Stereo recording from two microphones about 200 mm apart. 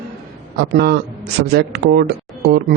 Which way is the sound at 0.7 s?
55° right (ahead or behind).